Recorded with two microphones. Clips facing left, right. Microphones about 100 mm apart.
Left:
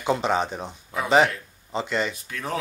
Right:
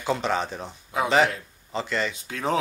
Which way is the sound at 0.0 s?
15° left (ahead or behind).